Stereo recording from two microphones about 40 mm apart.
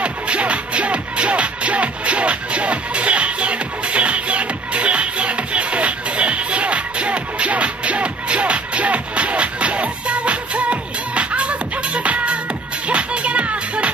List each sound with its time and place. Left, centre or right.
0.0 s music: right